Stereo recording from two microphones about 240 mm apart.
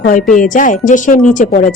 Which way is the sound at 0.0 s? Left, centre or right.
Left.